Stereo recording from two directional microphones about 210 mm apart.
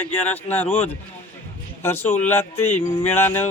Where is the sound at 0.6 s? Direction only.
30° left (ahead or behind).